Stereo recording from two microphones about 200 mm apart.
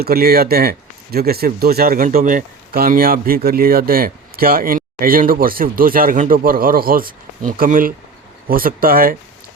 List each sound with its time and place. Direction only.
0.0 s speech: 50° right (ahead or behind)